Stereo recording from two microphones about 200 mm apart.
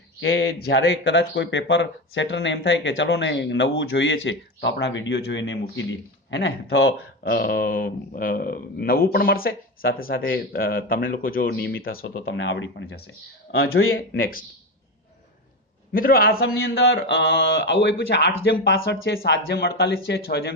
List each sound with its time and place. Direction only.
0.2 s speech: 70° left (ahead or behind)
7.3 s speech: 50° left (ahead or behind)
12.0 s speech: 75° left (ahead or behind); by 13.7 s 55° left (ahead or behind)
13.7 s speech: 90° left
14.2 s speech: 45° left (ahead or behind)
15.9 s speech: 45° left (ahead or behind)